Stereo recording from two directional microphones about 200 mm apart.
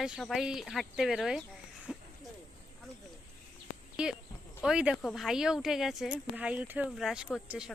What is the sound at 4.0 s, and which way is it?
Speech, 5° right (ahead or behind).